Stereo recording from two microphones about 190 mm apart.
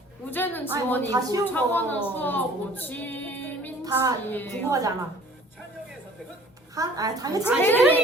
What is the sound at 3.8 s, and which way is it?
Speech, 15° right (ahead or behind).